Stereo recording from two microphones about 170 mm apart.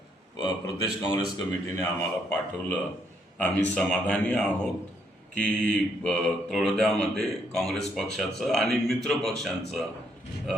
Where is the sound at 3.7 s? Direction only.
5° left (ahead or behind).